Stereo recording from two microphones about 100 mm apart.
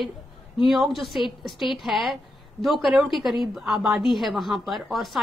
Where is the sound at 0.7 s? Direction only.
Centre (ahead or behind).